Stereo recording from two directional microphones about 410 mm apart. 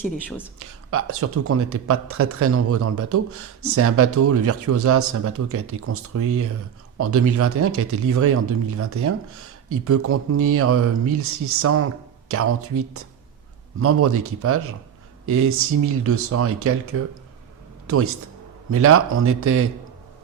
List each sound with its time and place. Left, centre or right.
0.0 s speech: centre
0.6 s a man's voice: right